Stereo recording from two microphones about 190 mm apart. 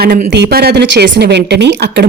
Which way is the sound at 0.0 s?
45° right (ahead or behind).